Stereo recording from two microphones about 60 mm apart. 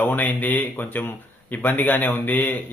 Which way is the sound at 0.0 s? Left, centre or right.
Left.